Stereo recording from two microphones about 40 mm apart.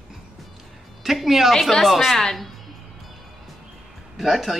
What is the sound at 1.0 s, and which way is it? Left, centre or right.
Speech, centre.